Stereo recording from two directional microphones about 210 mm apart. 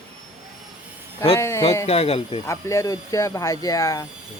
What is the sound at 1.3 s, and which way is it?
Speech, 15° left (ahead or behind).